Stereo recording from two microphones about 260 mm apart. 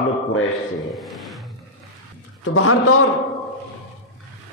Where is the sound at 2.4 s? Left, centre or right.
Left.